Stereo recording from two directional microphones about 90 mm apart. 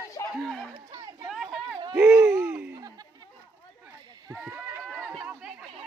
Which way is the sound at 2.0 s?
30° right (ahead or behind).